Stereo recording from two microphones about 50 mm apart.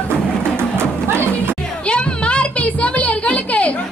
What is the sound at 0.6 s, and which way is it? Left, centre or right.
Music, right.